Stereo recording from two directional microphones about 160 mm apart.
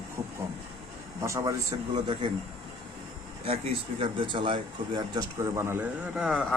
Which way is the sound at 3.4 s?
35° right (ahead or behind).